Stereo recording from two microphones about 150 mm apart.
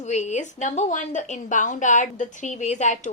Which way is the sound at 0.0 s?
50° left (ahead or behind).